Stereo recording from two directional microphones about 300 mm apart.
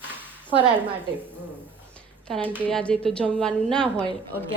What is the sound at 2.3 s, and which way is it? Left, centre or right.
Speech, centre.